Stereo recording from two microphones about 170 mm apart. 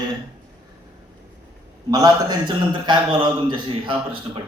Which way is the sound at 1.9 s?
20° right (ahead or behind).